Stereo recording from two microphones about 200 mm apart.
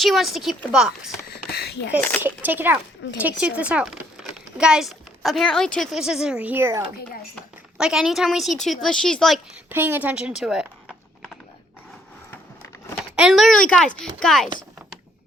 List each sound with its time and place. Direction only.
0.0 s speech: centre (ahead or behind)
1.3 s a sound: 55° left (ahead or behind)
2.0 s speech: 10° left (ahead or behind)
2.2 s speech: 10° right (ahead or behind)
9.6 s speech: 10° right (ahead or behind)
13.0 s speech: centre (ahead or behind)